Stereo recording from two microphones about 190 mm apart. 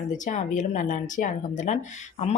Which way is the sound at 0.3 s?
40° left (ahead or behind).